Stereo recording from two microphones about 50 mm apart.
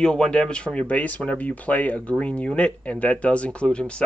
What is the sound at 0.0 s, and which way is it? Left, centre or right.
Speech, centre.